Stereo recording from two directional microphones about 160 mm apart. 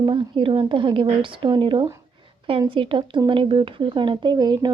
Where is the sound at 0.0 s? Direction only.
30° right (ahead or behind).